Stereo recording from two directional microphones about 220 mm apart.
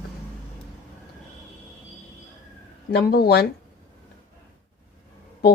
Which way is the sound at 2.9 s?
45° left (ahead or behind).